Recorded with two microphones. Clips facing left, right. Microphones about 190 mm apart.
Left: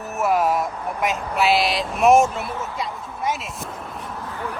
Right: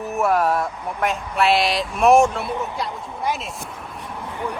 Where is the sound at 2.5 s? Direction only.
20° right (ahead or behind).